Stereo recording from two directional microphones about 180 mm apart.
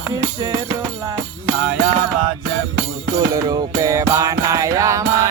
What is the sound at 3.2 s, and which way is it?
Music, 20° right (ahead or behind).